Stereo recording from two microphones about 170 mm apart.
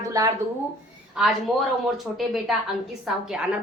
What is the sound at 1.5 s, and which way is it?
Speech, 5° right (ahead or behind).